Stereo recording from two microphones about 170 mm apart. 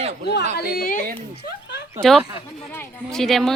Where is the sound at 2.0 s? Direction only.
Centre (ahead or behind).